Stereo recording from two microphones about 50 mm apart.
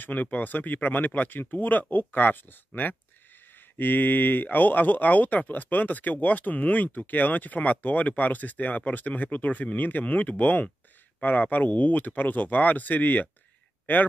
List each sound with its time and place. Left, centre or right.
0.0 s speech: left